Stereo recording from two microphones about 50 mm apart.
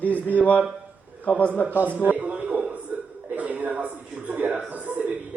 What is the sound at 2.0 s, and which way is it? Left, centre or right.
Speech, right.